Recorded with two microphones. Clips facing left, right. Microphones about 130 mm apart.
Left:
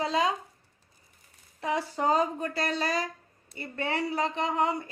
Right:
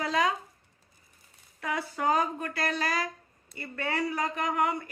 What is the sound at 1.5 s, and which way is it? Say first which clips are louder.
A woman's voice: left 3 dB; 30° left (ahead or behind).